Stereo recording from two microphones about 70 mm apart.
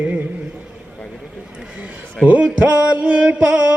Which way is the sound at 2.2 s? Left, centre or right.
Centre.